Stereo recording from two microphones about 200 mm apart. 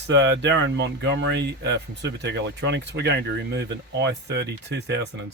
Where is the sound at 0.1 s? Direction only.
60° right (ahead or behind).